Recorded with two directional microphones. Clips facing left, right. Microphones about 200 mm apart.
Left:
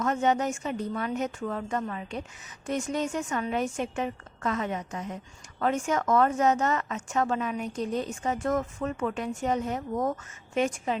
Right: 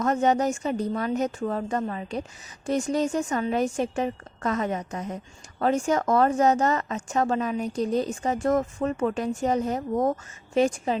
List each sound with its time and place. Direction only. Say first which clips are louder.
0.0 s a woman's voice: right 3 dB; 40° right (ahead or behind)